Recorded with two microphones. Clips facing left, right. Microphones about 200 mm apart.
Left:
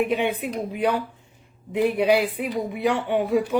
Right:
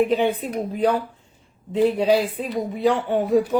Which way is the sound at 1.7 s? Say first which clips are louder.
Right 2 dB; 15° left (ahead or behind).